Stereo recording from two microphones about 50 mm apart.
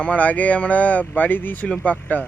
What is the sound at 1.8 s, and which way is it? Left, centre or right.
Speech, left.